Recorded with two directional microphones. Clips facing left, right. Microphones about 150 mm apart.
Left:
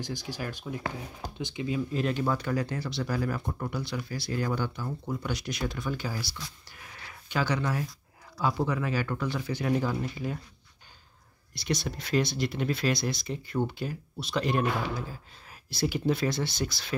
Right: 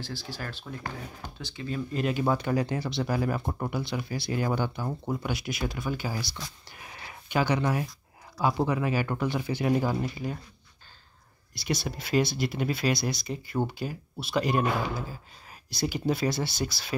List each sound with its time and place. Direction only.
0.0 s speech: 15° left (ahead or behind)
1.9 s speech: centre (ahead or behind)
2.1 s speech: 20° right (ahead or behind)
5.2 s speech: 5° right (ahead or behind)
6.8 s a sound: 20° right (ahead or behind)
8.4 s speech: 15° right (ahead or behind)
10.1 s speech: centre (ahead or behind)
11.5 s speech: 5° right (ahead or behind)